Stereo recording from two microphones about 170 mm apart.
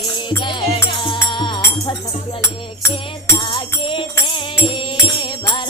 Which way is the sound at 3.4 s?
30° left (ahead or behind).